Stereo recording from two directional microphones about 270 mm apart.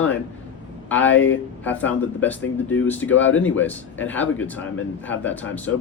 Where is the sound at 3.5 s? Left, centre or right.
Centre.